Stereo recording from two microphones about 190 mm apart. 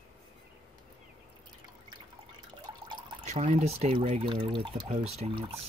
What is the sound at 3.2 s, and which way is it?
Speech, 35° right (ahead or behind).